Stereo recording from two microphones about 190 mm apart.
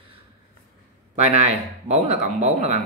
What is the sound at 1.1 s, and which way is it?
A man's voice, 35° right (ahead or behind).